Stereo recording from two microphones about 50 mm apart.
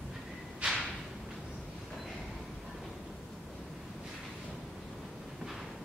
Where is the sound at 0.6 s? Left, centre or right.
Right.